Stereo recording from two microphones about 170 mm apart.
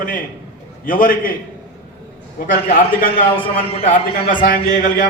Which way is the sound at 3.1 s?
35° left (ahead or behind).